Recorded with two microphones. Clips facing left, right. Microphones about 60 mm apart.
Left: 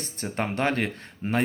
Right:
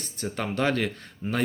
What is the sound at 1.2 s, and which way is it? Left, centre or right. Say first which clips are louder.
Speech: left 2 dB; left.